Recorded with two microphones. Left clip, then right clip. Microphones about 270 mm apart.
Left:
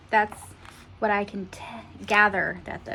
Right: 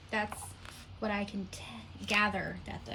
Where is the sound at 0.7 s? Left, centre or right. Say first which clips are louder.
Left 11 dB; left.